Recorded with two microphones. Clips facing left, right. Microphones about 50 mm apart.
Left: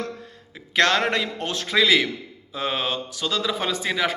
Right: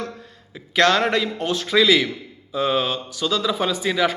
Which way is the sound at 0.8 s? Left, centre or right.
Left.